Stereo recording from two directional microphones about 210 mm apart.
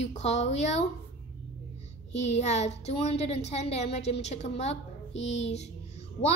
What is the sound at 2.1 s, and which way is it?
A woman's voice, 30° left (ahead or behind).